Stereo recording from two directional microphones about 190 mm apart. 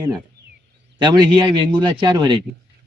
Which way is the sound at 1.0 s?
20° right (ahead or behind).